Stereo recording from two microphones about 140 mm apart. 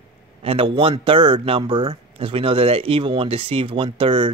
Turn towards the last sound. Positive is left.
turn(degrees=-40)  # may be behind; listen again after turning